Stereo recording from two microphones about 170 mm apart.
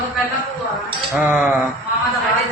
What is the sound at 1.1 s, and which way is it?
Speech, 5° right (ahead or behind).